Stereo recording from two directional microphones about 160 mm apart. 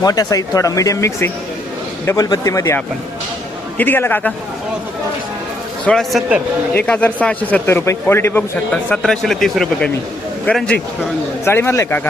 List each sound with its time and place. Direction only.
0.0 s a man's voice: 25° left (ahead or behind)
5.8 s a man's voice: 5° left (ahead or behind)
6.7 s a man's voice: 10° left (ahead or behind)